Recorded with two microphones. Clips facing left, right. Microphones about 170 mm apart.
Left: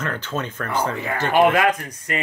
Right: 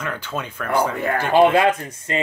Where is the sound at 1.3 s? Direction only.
30° right (ahead or behind).